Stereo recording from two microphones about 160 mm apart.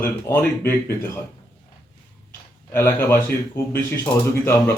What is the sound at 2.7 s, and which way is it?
Speech, 15° left (ahead or behind).